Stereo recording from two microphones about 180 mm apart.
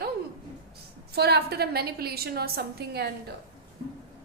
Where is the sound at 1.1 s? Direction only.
65° right (ahead or behind).